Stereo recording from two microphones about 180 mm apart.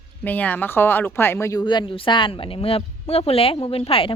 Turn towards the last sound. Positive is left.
turn(degrees=30)  # may be behind; listen again after turning